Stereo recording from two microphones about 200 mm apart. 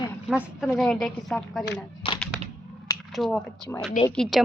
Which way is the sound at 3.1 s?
Centre (ahead or behind).